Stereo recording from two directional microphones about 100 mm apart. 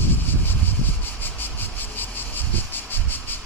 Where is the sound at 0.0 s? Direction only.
20° left (ahead or behind).